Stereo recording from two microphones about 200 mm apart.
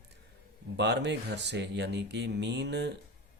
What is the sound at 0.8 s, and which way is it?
Speech, 60° right (ahead or behind).